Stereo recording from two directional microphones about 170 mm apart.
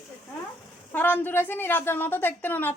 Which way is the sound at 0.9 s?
10° left (ahead or behind).